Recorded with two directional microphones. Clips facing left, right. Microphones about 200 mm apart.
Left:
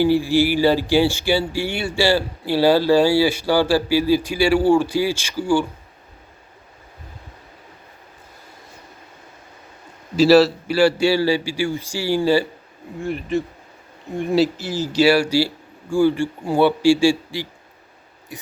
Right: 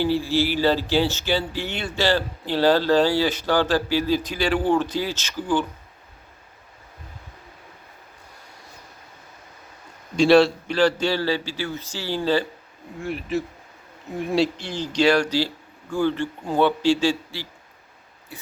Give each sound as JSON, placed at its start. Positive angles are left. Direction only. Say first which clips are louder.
{"t": 0.0, "sound": "speech", "louder": "left 5 dB", "side_deg": 15}
{"t": 10.2, "sound": "speech", "louder": "left 3 dB", "side_deg": 5}
{"t": 13.0, "sound": "speech", "louder": "left 3 dB", "side_deg": 0}
{"t": 18.3, "sound": "a sound", "louder": "left 5 dB", "side_deg": 15}